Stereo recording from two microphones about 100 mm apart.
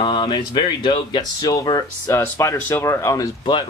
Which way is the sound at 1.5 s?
35° left (ahead or behind).